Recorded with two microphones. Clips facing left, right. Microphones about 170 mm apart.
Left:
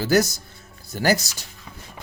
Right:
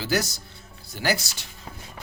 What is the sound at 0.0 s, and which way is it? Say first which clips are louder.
Speech: left 7 dB; 45° left (ahead or behind).